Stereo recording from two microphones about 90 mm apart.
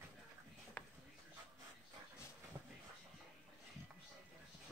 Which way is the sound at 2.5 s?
30° right (ahead or behind).